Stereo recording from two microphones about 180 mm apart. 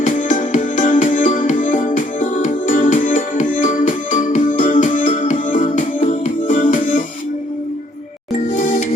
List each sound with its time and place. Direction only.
0.0 s music: 45° left (ahead or behind)
8.5 s music: 45° left (ahead or behind)